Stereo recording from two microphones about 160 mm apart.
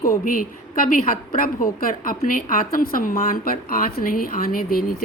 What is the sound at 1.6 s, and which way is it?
A woman's voice, 60° left (ahead or behind).